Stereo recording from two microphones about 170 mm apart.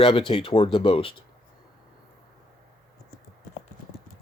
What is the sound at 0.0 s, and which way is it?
Speech, 30° left (ahead or behind).